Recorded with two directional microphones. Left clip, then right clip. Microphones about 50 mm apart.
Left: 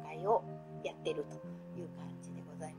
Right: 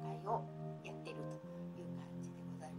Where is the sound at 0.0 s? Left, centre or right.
Left.